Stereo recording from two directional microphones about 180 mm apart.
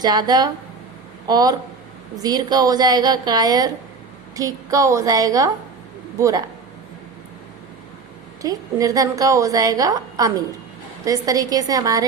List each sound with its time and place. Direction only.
0.0 s a woman's voice: 25° right (ahead or behind)
8.4 s a woman's voice: 20° right (ahead or behind)